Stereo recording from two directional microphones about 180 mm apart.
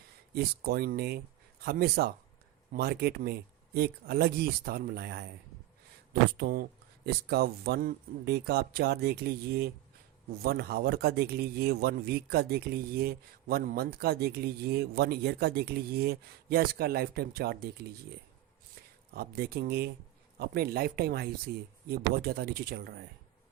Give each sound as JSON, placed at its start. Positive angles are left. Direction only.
{"t": 0.3, "sound": "a man's voice", "side_deg": -60}
{"t": 6.3, "sound": "a man's voice", "side_deg": -55}
{"t": 19.1, "sound": "a man's voice", "side_deg": -60}